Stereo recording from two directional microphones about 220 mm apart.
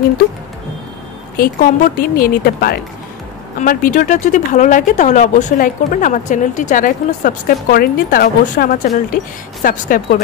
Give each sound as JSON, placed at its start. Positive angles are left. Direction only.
{"t": 1.3, "sound": "speech", "side_deg": 40}